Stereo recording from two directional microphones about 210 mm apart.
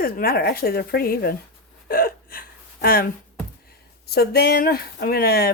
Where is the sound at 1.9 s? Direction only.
45° left (ahead or behind).